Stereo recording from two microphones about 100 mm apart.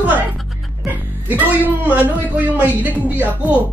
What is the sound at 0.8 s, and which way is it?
A woman's voice, 20° right (ahead or behind).